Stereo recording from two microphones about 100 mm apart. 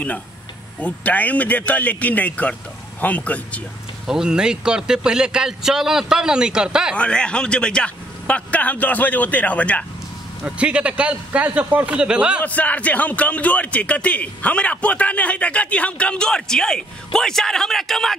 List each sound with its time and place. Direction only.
0.7 s speech: 15° left (ahead or behind)
4.1 s speech: 5° right (ahead or behind)
7.0 s speech: 10° left (ahead or behind)
10.4 s speech: 10° right (ahead or behind)
12.4 s speech: 15° left (ahead or behind)